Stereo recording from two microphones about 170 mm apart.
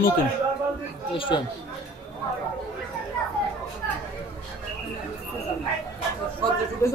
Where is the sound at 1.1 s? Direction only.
30° left (ahead or behind).